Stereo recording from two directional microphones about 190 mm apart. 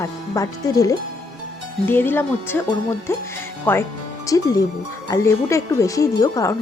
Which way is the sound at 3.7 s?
10° left (ahead or behind).